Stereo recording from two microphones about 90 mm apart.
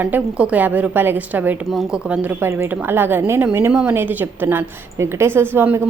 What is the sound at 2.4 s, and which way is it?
A woman's voice, 25° right (ahead or behind).